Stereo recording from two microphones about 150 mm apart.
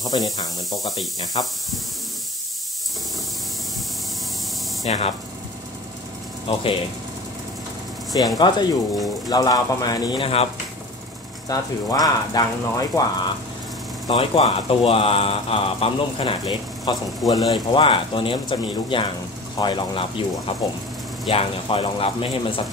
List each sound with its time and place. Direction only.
0.2 s speech: centre (ahead or behind)
1.3 s speech: 35° left (ahead or behind)
4.8 s speech: 45° left (ahead or behind)
6.4 s speech: 35° left (ahead or behind)
8.4 s speech: 30° left (ahead or behind)
11.4 s speech: 25° left (ahead or behind)
14.0 s speech: 35° left (ahead or behind)
17.2 s speech: 25° left (ahead or behind)
17.8 s speech: 35° left (ahead or behind)